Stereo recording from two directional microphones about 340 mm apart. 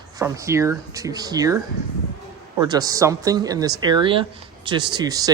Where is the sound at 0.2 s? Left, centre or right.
Centre.